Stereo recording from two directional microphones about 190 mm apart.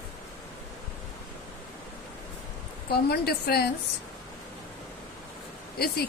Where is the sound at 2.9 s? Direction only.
55° left (ahead or behind).